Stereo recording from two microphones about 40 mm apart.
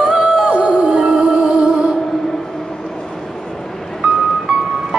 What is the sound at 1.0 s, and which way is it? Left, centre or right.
Music, centre.